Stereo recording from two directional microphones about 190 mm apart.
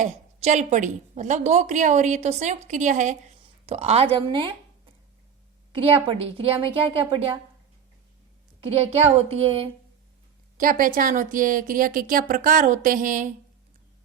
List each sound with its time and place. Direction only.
0.0 s a woman's voice: 35° right (ahead or behind)
3.4 s a sound: 35° right (ahead or behind)
4.1 s a woman's voice: 25° right (ahead or behind)
5.8 s a woman's voice: 30° right (ahead or behind)
8.6 s a woman's voice: 30° right (ahead or behind)
10.6 s a woman's voice: 45° right (ahead or behind)